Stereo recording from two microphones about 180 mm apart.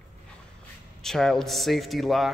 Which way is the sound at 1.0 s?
Centre (ahead or behind).